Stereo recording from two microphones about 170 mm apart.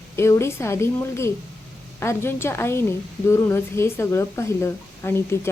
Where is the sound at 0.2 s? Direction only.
15° left (ahead or behind).